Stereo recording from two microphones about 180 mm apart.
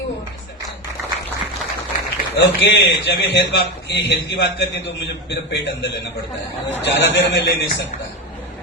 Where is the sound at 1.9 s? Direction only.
45° left (ahead or behind).